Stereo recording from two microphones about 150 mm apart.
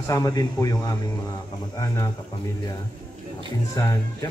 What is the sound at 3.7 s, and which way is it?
Speech, 20° left (ahead or behind).